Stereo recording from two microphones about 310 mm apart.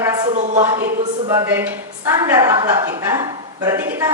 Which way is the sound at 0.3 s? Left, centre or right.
Right.